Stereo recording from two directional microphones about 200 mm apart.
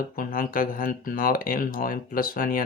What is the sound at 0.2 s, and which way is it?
Speech, 45° left (ahead or behind).